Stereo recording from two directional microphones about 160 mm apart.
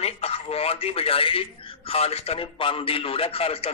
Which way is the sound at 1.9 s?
40° left (ahead or behind).